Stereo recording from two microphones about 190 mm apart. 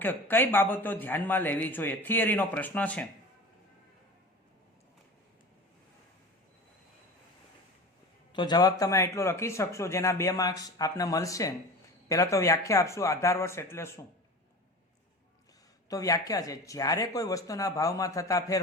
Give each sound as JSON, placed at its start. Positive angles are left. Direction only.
{"t": 0.0, "sound": "speech", "side_deg": 10}
{"t": 8.3, "sound": "speech", "side_deg": 25}
{"t": 15.9, "sound": "speech", "side_deg": 20}